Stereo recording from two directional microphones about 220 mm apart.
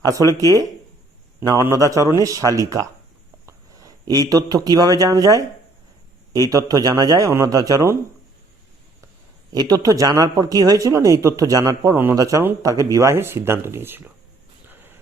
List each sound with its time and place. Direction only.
0.0 s a man's voice: 15° right (ahead or behind)
9.5 s speech: 20° right (ahead or behind)
14.7 s a sound: 10° right (ahead or behind)